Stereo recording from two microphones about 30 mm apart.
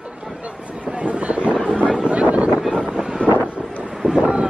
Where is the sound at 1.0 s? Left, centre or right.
Right.